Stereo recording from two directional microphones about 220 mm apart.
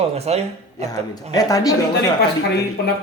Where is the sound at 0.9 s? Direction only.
15° left (ahead or behind).